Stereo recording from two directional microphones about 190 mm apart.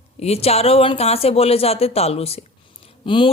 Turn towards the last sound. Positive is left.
turn(degrees=25)  # may be behind; listen again after turning